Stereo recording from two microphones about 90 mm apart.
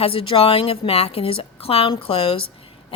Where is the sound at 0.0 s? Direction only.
90° left.